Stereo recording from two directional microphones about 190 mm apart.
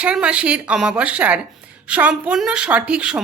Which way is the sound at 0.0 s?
5° right (ahead or behind).